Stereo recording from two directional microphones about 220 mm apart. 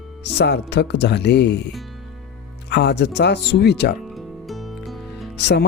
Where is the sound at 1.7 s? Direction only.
Centre (ahead or behind).